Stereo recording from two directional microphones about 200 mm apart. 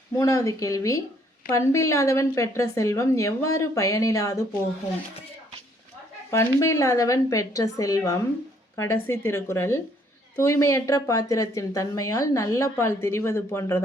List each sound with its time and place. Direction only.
0.2 s speech: 15° left (ahead or behind)
6.3 s speech: 15° left (ahead or behind)